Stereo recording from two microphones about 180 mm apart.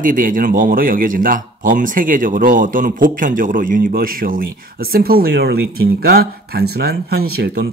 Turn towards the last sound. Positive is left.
turn(degrees=-65)  # may be behind; listen again after turning